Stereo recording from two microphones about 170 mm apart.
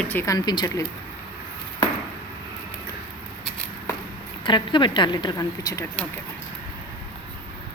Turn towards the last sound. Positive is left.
turn(degrees=20)  # may be behind; listen again after turning